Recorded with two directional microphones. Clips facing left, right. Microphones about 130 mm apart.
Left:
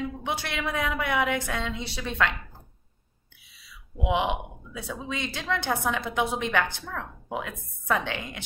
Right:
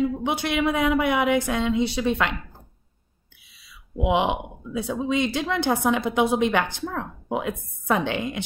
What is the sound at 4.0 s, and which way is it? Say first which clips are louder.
A woman's voice: right 4 dB; 20° right (ahead or behind).